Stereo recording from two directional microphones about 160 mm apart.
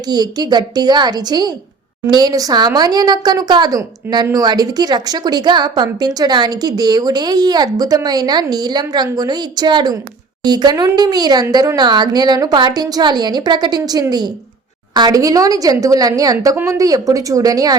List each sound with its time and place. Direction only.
0.1 s a woman's voice: 25° right (ahead or behind)